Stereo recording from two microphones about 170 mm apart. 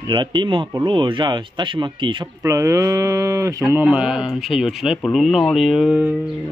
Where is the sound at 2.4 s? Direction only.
15° right (ahead or behind).